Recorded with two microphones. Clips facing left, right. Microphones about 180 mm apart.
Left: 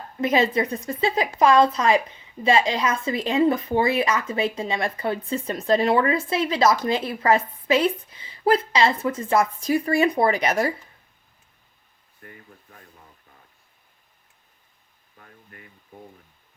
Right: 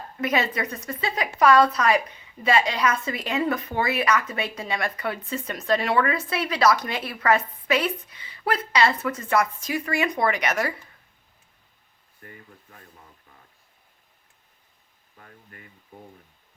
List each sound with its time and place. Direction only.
0.2 s speech: 25° left (ahead or behind)